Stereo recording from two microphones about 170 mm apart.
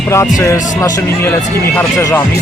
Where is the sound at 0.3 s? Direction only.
20° left (ahead or behind).